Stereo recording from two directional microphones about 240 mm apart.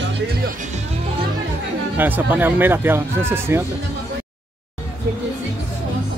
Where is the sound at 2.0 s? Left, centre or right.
Centre.